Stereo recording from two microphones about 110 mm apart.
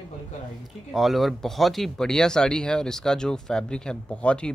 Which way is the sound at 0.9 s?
Centre (ahead or behind).